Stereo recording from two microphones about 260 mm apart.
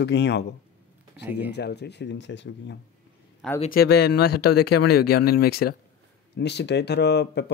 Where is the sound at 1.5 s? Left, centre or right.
Left.